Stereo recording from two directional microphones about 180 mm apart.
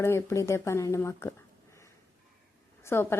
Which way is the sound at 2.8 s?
15° left (ahead or behind).